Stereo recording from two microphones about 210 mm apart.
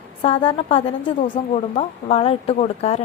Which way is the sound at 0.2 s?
25° left (ahead or behind).